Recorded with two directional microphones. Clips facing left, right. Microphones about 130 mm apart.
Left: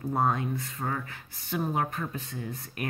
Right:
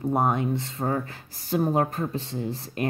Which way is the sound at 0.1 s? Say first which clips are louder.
Right 3 dB; 20° right (ahead or behind).